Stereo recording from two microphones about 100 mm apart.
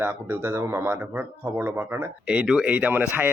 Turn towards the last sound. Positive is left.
turn(degrees=-15)  # may be behind; listen again after turning